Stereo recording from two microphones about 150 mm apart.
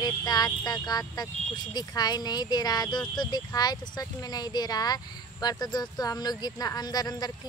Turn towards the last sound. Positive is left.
turn(degrees=25)  # may be behind; listen again after turning